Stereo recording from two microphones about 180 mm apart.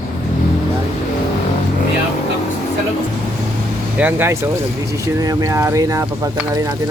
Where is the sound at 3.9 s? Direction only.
10° right (ahead or behind).